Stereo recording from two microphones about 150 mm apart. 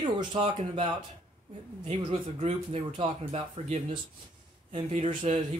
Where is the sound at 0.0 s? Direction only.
30° right (ahead or behind).